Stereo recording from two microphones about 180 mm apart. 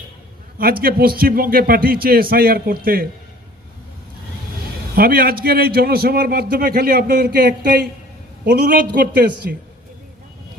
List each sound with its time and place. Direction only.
0.6 s a man's voice: 55° right (ahead or behind)
4.9 s a man's voice: 55° right (ahead or behind)